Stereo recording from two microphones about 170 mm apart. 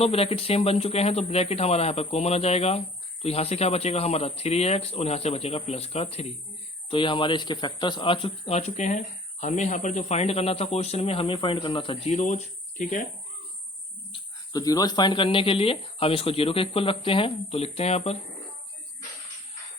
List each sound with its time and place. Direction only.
0.0 s speech: 35° left (ahead or behind)
12.1 s speech: 45° left (ahead or behind)
14.1 s speech: 25° left (ahead or behind); by 18.2 s 40° left (ahead or behind)